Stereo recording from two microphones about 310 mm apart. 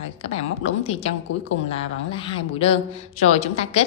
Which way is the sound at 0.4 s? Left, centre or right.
Centre.